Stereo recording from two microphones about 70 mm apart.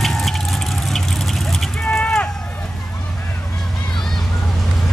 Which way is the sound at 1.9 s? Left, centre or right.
Centre.